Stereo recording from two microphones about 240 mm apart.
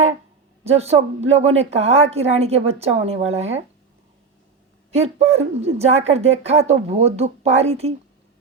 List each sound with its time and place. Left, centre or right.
0.6 s a woman's voice: right
4.9 s a woman's voice: right